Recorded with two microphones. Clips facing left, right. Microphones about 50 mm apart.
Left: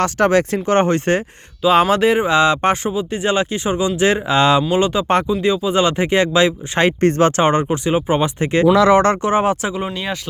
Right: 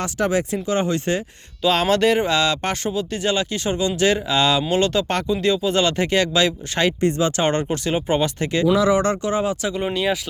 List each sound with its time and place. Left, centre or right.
0.0 s speech: left
1.6 s speech: centre
4.7 s speech: centre
7.0 s speech: left
7.7 s speech: centre
8.7 s speech: left
9.2 s speech: left
9.7 s speech: centre